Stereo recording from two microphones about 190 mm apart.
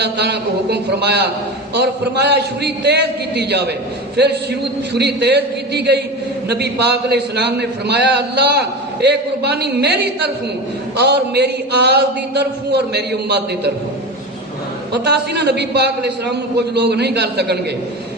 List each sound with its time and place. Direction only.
0.0 s a man's voice: 60° right (ahead or behind)
4.9 s a man's voice: 60° right (ahead or behind)
14.9 s a man's voice: 60° right (ahead or behind)